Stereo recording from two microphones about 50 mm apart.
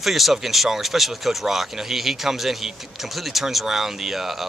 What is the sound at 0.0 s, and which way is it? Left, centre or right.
Speech, centre.